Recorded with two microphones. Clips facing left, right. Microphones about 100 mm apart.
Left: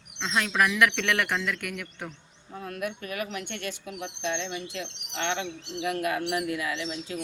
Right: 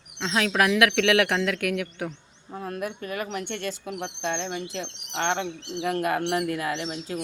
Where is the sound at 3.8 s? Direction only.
50° right (ahead or behind).